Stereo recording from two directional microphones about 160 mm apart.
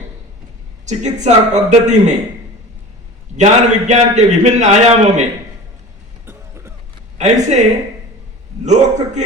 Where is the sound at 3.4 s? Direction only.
45° right (ahead or behind).